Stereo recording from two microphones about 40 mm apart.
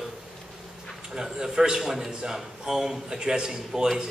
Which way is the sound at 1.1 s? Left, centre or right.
Centre.